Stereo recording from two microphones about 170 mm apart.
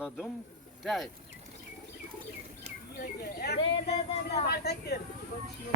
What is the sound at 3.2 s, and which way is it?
Speech, 70° left (ahead or behind).